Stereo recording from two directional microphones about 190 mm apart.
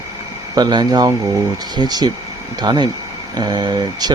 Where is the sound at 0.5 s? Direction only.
20° right (ahead or behind).